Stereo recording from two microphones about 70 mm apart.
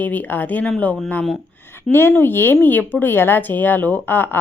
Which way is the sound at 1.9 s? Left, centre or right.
Left.